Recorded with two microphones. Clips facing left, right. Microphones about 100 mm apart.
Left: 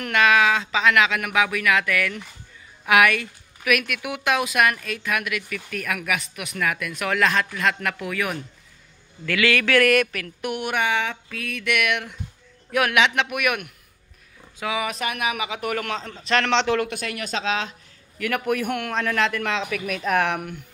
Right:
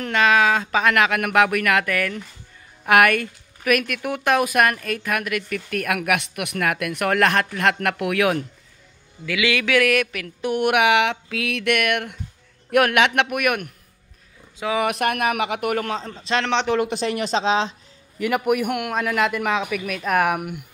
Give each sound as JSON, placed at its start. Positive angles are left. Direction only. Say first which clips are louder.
{"t": 0.0, "sound": "a woman's voice", "louder": "right 1 dB", "side_deg": -30}
{"t": 1.9, "sound": "a man's voice", "louder": "right 1 dB", "side_deg": -40}
{"t": 9.2, "sound": "a man's voice", "louder": "left 1 dB", "side_deg": -15}
{"t": 9.8, "sound": "a sound", "louder": "left 1 dB", "side_deg": 0}
{"t": 10.6, "sound": "mantra", "louder": "right 7 dB", "side_deg": -75}
{"t": 11.7, "sound": "a woman's voice", "louder": "right 1 dB", "side_deg": -50}
{"t": 14.8, "sound": "speech", "louder": "right 7 dB", "side_deg": -60}
{"t": 15.7, "sound": "a man's voice", "louder": "right 3 dB", "side_deg": -35}
{"t": 16.3, "sound": "a man's voice", "louder": "even", "side_deg": -20}
{"t": 16.9, "sound": "speech", "louder": "right 7 dB", "side_deg": -25}
{"t": 18.2, "sound": "a man's voice", "louder": "right 4 dB", "side_deg": -15}
{"t": 19.9, "sound": "a man's voice", "louder": "right 2 dB", "side_deg": 0}